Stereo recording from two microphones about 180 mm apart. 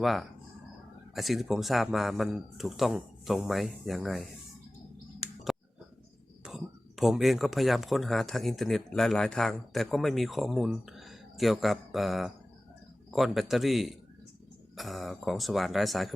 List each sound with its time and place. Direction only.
0.0 s a man's voice: centre (ahead or behind)
5.5 s a sound: centre (ahead or behind)
6.4 s a man's voice: centre (ahead or behind)